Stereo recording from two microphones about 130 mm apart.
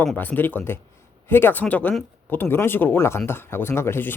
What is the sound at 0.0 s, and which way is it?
Speech, 10° left (ahead or behind).